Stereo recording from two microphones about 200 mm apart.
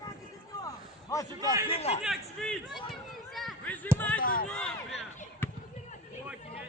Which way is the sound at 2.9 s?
Centre (ahead or behind).